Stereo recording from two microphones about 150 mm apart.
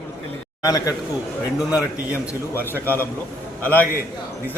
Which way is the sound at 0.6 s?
25° left (ahead or behind).